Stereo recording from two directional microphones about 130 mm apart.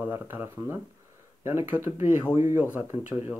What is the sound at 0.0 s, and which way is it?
Speech, 15° right (ahead or behind).